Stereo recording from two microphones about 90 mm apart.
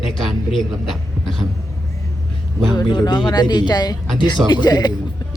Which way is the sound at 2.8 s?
55° left (ahead or behind).